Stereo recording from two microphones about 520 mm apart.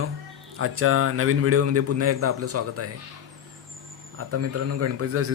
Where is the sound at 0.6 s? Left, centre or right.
Right.